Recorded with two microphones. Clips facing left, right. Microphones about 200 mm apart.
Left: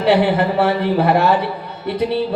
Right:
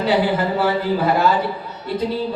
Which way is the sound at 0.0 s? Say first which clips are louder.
Left 3 dB; 65° left (ahead or behind).